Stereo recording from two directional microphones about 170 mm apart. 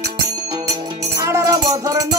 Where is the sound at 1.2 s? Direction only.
20° right (ahead or behind).